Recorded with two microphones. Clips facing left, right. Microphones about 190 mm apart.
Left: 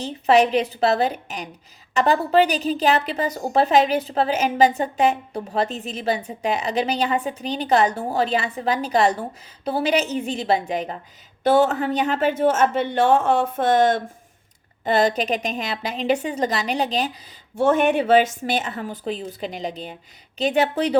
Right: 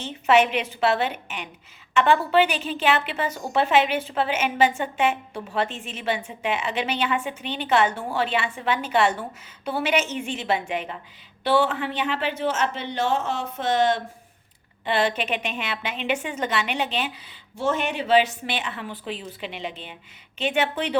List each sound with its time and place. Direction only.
0.0 s a woman's voice: 35° left (ahead or behind)
17.6 s a woman's voice: 55° left (ahead or behind); by 20.9 s 35° left (ahead or behind)